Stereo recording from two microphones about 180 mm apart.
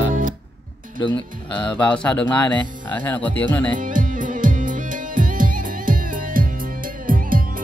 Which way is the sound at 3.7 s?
45° right (ahead or behind).